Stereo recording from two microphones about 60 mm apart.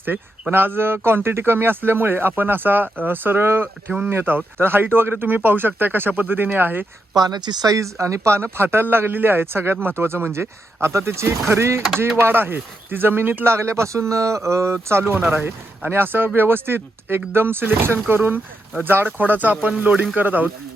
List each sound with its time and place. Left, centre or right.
0.5 s speech: right
7.1 s speech: right
8.5 s speech: right